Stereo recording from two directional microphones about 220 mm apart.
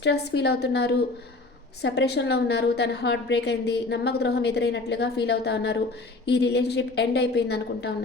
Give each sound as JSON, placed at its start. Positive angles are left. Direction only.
{"t": 0.0, "sound": "a woman's voice", "side_deg": 50}